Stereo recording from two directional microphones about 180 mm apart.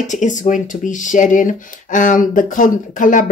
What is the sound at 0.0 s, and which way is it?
Speech, 45° left (ahead or behind).